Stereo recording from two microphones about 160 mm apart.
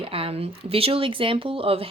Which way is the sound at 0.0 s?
35° right (ahead or behind).